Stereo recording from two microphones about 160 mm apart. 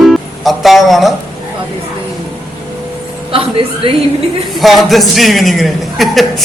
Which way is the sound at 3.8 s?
35° right (ahead or behind).